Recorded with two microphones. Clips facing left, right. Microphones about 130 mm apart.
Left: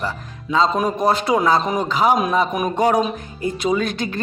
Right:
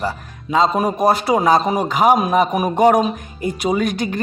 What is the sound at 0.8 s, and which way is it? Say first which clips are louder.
Speech: right 2 dB; 10° right (ahead or behind).